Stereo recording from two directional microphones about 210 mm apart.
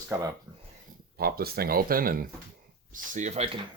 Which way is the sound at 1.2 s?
45° right (ahead or behind).